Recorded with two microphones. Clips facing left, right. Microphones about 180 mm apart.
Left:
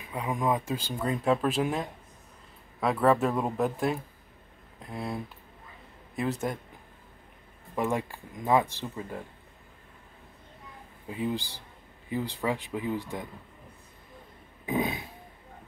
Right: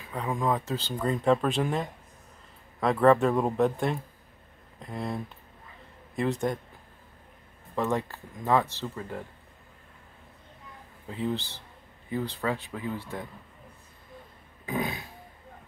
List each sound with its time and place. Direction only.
0.1 s speech: 15° left (ahead or behind)
7.7 s speech: 10° left (ahead or behind)
11.1 s speech: 15° left (ahead or behind)
14.7 s burping: 20° left (ahead or behind)